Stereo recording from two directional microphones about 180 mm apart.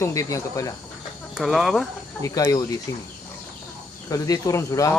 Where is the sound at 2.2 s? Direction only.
20° left (ahead or behind).